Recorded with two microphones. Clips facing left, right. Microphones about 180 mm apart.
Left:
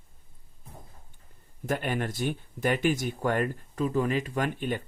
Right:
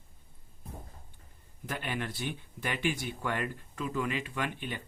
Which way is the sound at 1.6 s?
45° left (ahead or behind).